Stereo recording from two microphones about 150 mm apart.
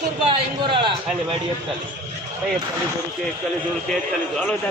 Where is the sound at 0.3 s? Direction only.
35° right (ahead or behind).